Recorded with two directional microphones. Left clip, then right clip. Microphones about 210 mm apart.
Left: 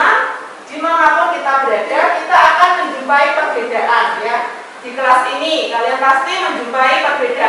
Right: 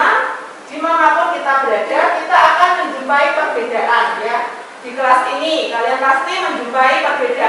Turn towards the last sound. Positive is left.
turn(degrees=-10)  # may be behind; listen again after turning